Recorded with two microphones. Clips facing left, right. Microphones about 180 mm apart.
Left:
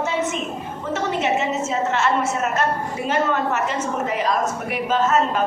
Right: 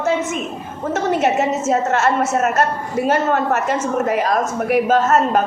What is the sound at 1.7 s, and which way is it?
A man's voice, 45° right (ahead or behind).